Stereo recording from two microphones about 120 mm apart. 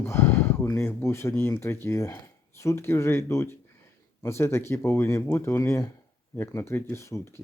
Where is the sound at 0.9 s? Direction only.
20° left (ahead or behind).